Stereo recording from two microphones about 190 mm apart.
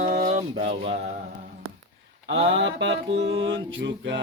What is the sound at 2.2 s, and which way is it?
Mantra, 75° right (ahead or behind).